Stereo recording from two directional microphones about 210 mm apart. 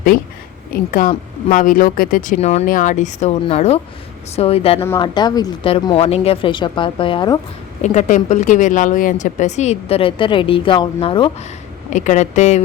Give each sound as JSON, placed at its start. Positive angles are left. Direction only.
{"t": 0.9, "sound": "speech", "side_deg": 40}
{"t": 4.8, "sound": "speech", "side_deg": 15}
{"t": 7.8, "sound": "speech", "side_deg": 35}
{"t": 11.9, "sound": "speech", "side_deg": 35}